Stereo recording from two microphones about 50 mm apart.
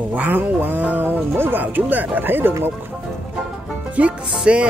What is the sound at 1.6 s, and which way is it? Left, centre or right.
Speech, right.